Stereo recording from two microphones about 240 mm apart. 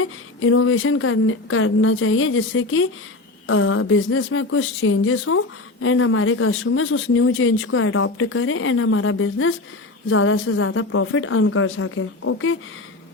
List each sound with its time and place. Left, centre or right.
0.0 s speech: left